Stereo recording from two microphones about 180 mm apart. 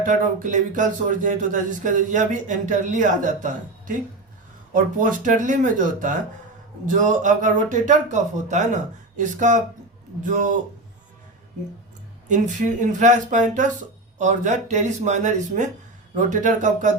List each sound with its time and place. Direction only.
0.0 s speech: 45° right (ahead or behind)
12.8 s speech: 45° right (ahead or behind)